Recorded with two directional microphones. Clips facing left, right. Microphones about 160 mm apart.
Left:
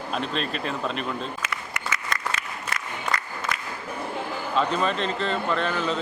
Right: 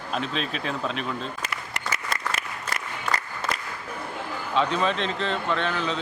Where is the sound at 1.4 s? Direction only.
30° right (ahead or behind).